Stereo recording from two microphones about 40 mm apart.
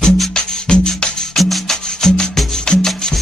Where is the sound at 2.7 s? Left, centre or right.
Left.